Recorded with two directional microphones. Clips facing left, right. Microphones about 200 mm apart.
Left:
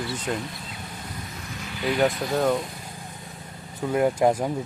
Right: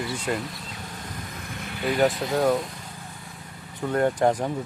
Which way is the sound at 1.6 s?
55° right (ahead or behind).